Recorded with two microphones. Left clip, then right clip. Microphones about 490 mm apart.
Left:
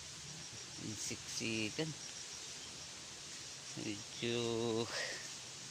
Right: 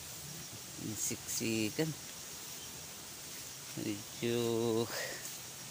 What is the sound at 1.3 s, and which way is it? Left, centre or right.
Speech, left.